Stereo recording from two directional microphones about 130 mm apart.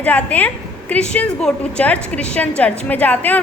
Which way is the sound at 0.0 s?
10° left (ahead or behind).